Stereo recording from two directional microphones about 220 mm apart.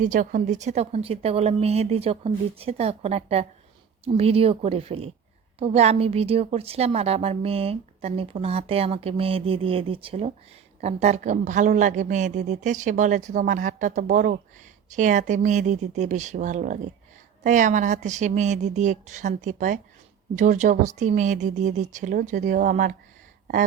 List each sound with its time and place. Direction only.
0.0 s a woman's voice: 35° right (ahead or behind)